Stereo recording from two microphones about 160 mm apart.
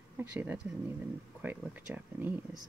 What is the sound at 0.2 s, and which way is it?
Speech, 15° right (ahead or behind).